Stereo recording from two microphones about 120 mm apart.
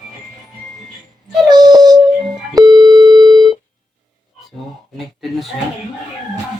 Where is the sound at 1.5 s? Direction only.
35° right (ahead or behind).